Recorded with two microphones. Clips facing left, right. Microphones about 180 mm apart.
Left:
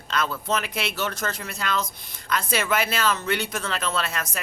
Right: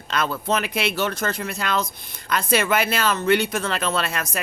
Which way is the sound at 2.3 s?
60° right (ahead or behind).